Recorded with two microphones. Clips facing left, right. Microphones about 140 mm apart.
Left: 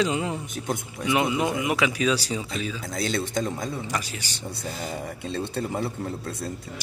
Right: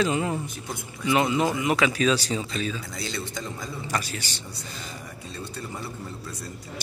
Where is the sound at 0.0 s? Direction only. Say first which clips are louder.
Right 1 dB; 15° left (ahead or behind).